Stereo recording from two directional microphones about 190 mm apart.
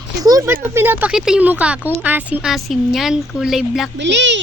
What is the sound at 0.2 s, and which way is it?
Speech, 20° right (ahead or behind).